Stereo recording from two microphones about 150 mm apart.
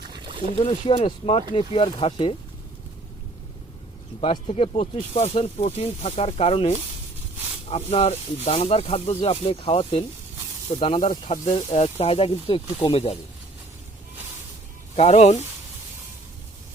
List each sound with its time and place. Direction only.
0.1 s a sound: 35° right (ahead or behind)
0.5 s speech: 40° left (ahead or behind)
4.2 s speech: 40° left (ahead or behind)
11.0 s speech: 55° left (ahead or behind)
14.9 s speech: 50° left (ahead or behind)